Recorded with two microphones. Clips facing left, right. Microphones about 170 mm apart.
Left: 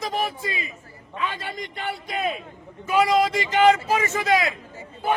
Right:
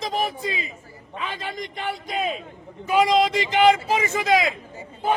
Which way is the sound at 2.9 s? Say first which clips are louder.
Right 1 dB; 20° right (ahead or behind).